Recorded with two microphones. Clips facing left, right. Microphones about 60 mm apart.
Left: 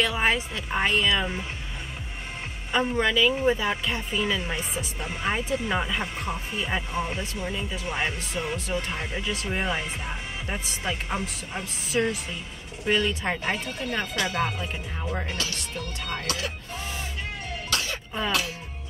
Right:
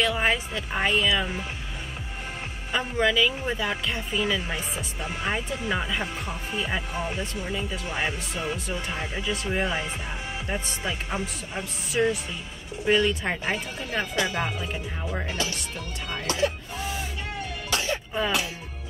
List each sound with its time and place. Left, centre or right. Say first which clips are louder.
0.0 s speech: even; centre
2.7 s speech: left 1 dB; centre
14.1 s speech: even; centre
14.6 s speech: right 1 dB; centre
16.3 s speech: right 9 dB; right
17.6 s music: right 2 dB; right